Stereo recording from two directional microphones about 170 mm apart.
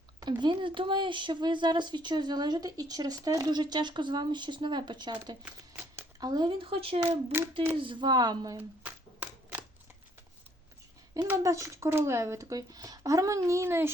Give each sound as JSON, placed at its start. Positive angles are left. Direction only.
{"t": 0.2, "sound": "speech", "side_deg": -25}
{"t": 5.5, "sound": "speech", "side_deg": -15}
{"t": 7.3, "sound": "speech", "side_deg": -10}
{"t": 7.8, "sound": "speech", "side_deg": -25}
{"t": 8.5, "sound": "shuffling cards", "side_deg": -10}
{"t": 11.1, "sound": "speech", "side_deg": -20}